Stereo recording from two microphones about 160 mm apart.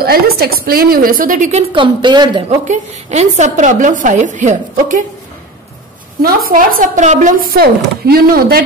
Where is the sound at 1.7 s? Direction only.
30° right (ahead or behind).